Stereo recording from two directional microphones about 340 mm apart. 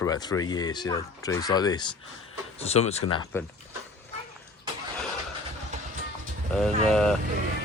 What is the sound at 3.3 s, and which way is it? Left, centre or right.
Speech, centre.